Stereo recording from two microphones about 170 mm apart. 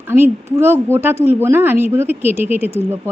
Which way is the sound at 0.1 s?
15° right (ahead or behind).